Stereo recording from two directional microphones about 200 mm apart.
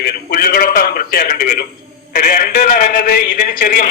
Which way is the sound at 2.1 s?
45° left (ahead or behind).